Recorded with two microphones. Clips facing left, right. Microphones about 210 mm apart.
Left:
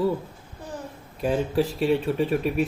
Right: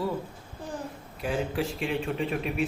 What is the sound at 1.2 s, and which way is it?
Speech, 40° left (ahead or behind).